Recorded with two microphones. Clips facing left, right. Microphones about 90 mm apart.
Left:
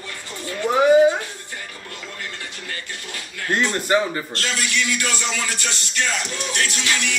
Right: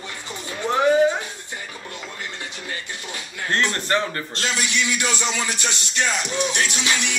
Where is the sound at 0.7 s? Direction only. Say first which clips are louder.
Left 3 dB; 10° left (ahead or behind).